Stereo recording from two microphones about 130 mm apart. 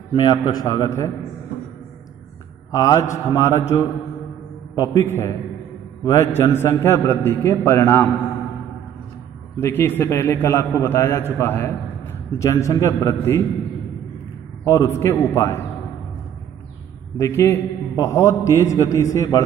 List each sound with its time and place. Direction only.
0.2 s a man's voice: 30° left (ahead or behind)
2.7 s a man's voice: 25° left (ahead or behind)
9.6 s a man's voice: 20° left (ahead or behind)
14.6 s a man's voice: 25° left (ahead or behind)
17.2 s a man's voice: 20° left (ahead or behind)